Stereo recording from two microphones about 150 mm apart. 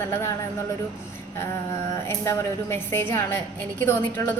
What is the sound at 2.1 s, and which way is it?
Music, 15° left (ahead or behind).